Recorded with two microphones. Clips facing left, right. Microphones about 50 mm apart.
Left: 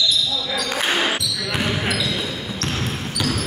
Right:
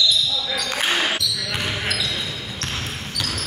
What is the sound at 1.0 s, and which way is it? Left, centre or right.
Basketball bounce, centre.